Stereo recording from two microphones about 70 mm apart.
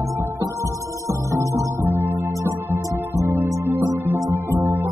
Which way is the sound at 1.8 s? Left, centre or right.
Right.